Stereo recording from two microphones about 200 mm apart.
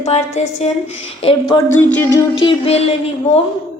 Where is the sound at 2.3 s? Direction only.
25° left (ahead or behind).